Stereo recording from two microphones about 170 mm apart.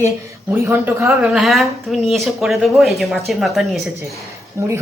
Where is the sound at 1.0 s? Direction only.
Centre (ahead or behind).